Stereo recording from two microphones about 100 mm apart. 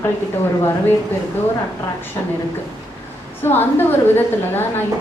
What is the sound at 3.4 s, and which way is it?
A woman's voice, 20° left (ahead or behind).